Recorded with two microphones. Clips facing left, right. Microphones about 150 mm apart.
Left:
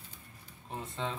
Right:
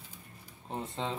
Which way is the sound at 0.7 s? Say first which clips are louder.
Right 2 dB; 25° right (ahead or behind).